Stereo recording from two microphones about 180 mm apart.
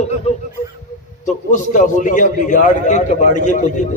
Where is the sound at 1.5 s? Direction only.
45° left (ahead or behind).